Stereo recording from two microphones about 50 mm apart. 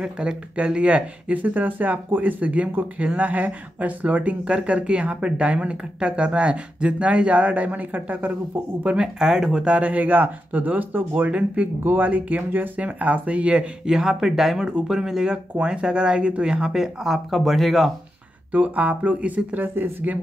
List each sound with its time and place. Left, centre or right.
0.0 s speech: centre
0.7 s speech: right
8.9 s speech: centre
11.8 s speech: right
13.8 s speech: centre
14.7 s speech: centre
18.5 s speech: right